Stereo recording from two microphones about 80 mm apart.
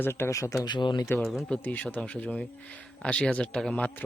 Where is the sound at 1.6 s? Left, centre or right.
Left.